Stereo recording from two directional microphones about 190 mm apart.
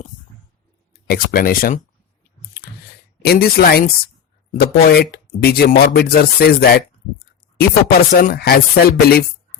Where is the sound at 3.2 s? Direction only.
55° left (ahead or behind).